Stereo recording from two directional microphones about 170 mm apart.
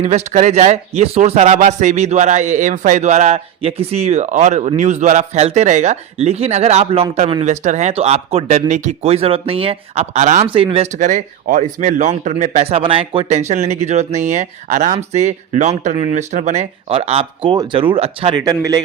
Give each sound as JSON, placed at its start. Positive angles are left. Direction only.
{"t": 0.0, "sound": "speech", "side_deg": -40}